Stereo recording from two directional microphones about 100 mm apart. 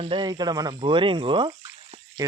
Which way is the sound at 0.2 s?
45° right (ahead or behind).